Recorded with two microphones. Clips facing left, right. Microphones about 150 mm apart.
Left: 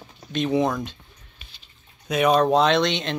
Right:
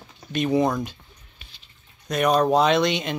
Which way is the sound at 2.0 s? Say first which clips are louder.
Left 1 dB; centre (ahead or behind).